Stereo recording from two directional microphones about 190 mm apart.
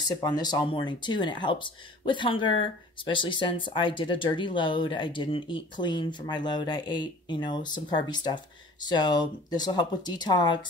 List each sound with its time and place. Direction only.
0.1 s speech: 20° left (ahead or behind)